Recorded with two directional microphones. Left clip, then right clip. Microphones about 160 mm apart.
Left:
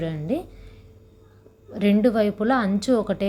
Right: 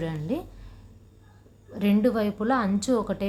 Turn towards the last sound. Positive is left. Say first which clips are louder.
# left 4 dB
turn(degrees=15)  # may be behind; listen again after turning